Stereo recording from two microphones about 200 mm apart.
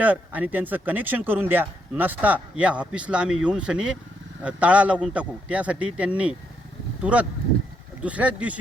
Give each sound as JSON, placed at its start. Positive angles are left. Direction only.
{"t": 0.0, "sound": "speech", "side_deg": -10}